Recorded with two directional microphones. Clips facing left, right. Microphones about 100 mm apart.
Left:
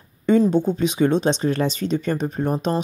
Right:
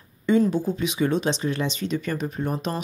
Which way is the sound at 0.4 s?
25° left (ahead or behind).